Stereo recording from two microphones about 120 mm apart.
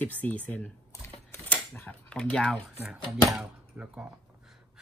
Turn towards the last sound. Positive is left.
turn(degrees=-10)  # may be behind; listen again after turning